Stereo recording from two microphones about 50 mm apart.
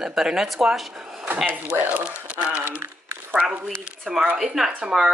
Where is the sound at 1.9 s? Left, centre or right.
Right.